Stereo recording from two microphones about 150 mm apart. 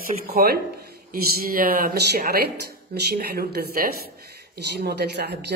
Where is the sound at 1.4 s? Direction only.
75° right (ahead or behind); by 5.5 s 90° right.